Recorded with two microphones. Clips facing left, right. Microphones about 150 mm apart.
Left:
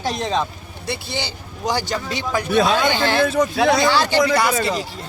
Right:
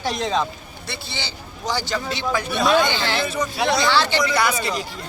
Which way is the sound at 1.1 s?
45° left (ahead or behind).